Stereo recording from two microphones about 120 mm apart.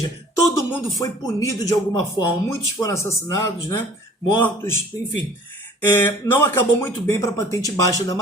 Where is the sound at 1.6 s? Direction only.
30° left (ahead or behind).